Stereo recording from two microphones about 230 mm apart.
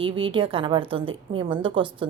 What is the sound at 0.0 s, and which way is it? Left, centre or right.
A woman's voice, right.